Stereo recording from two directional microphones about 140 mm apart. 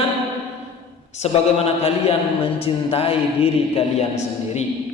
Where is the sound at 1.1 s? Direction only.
50° left (ahead or behind).